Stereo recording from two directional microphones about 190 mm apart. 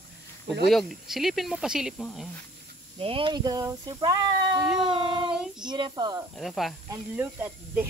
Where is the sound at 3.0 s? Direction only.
30° right (ahead or behind).